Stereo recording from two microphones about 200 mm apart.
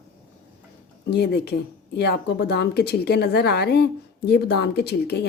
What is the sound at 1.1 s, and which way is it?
A woman's voice, 55° left (ahead or behind).